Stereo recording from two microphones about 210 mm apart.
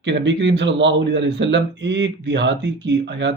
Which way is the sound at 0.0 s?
55° right (ahead or behind).